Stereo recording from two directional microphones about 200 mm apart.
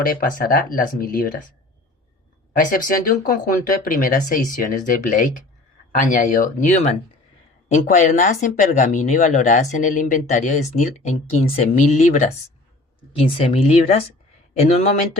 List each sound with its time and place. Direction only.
0.0 s speech: 45° left (ahead or behind)
2.5 s speech: 45° left (ahead or behind)